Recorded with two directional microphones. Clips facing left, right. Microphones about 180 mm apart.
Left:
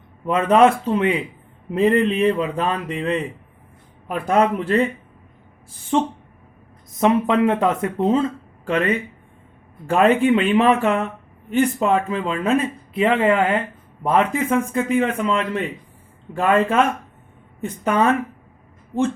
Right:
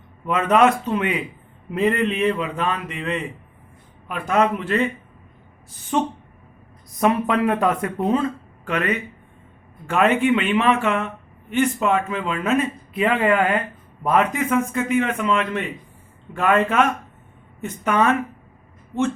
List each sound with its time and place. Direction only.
0.3 s speech: 30° left (ahead or behind)
5.9 s speech: 25° left (ahead or behind)